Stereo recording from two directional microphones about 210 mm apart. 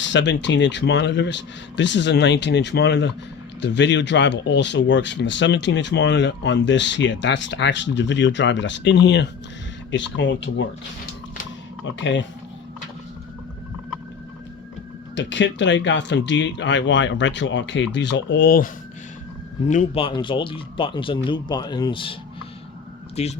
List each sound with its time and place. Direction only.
0.0 s speech: 60° left (ahead or behind)
11.9 s speech: 60° left (ahead or behind)
15.1 s speech: 60° left (ahead or behind)
19.6 s speech: 35° left (ahead or behind)